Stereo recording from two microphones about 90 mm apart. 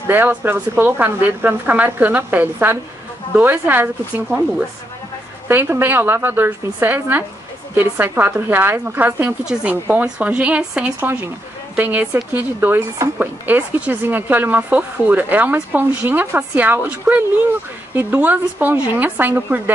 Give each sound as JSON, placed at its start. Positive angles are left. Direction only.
{"t": 0.0, "sound": "speech", "side_deg": -25}
{"t": 9.4, "sound": "speech", "side_deg": -10}
{"t": 11.0, "sound": "a woman's voice", "side_deg": -25}